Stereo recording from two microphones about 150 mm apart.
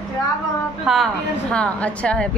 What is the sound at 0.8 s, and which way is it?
A woman's voice, centre (ahead or behind).